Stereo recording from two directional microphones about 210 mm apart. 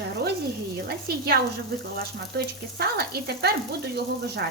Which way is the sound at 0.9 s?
50° right (ahead or behind).